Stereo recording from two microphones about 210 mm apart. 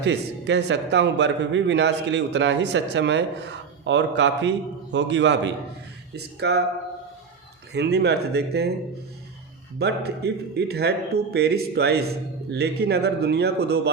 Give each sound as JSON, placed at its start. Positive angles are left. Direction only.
{"t": 0.0, "sound": "a man's voice", "side_deg": -55}
{"t": 7.7, "sound": "a man's voice", "side_deg": -50}
{"t": 9.7, "sound": "a man's voice", "side_deg": -50}